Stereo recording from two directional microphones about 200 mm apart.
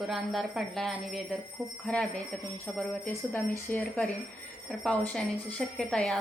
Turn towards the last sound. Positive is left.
turn(degrees=5)  # may be behind; listen again after turning